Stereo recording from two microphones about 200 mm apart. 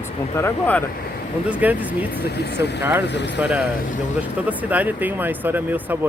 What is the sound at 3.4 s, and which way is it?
Speech, 5° right (ahead or behind).